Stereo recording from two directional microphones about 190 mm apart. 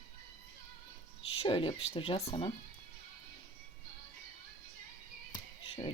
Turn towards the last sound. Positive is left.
turn(degrees=25)  # may be behind; listen again after turning